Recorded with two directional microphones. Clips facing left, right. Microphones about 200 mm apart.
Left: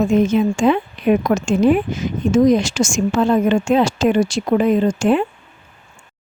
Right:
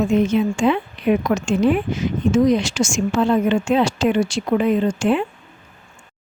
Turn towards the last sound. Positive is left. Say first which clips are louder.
# left 3 dB
turn(degrees=45)  # may be behind; listen again after turning